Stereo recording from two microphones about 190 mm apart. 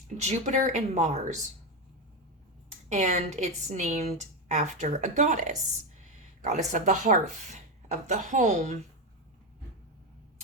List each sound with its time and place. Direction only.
0.2 s speech: 40° right (ahead or behind)
2.6 s speech: 40° right (ahead or behind)
6.7 s speech: 40° right (ahead or behind)